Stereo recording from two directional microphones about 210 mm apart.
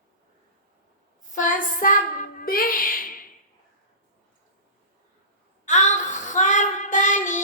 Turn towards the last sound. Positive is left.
turn(degrees=35)  # may be behind; listen again after turning